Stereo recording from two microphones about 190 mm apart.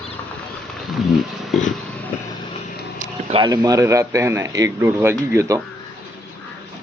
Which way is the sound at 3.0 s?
35° right (ahead or behind).